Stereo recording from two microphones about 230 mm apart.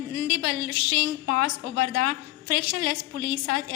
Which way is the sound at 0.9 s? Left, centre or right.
Right.